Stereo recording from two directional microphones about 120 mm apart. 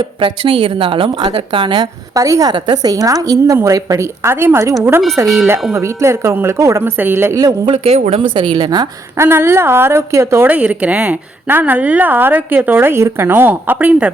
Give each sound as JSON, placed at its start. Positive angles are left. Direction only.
{"t": 0.2, "sound": "a woman's voice", "side_deg": -45}
{"t": 7.4, "sound": "speech", "side_deg": -40}
{"t": 7.9, "sound": "speech", "side_deg": -65}
{"t": 8.2, "sound": "a woman's voice", "side_deg": -45}
{"t": 9.1, "sound": "a woman's voice", "side_deg": -20}